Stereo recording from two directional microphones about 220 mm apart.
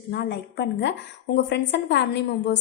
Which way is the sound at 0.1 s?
50° left (ahead or behind).